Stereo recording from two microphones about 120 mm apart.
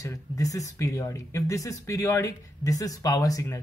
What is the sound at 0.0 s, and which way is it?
Speech, 30° left (ahead or behind).